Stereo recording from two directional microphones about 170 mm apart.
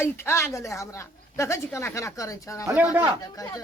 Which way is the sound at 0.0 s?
15° left (ahead or behind).